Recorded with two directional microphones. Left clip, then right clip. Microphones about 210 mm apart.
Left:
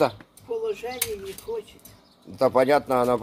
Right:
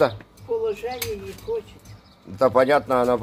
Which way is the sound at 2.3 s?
10° left (ahead or behind).